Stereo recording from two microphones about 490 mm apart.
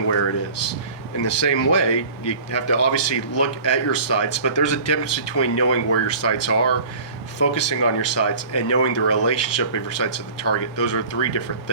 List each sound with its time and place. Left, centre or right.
0.3 s speech: left